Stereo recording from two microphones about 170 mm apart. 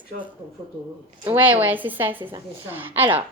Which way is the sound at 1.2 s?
10° right (ahead or behind).